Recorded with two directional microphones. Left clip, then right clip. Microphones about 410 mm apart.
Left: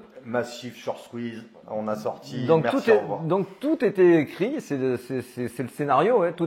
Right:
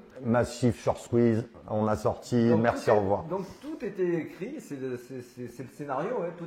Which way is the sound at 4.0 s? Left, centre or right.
Left.